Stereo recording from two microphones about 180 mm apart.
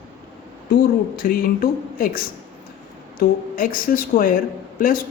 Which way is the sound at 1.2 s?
55° left (ahead or behind).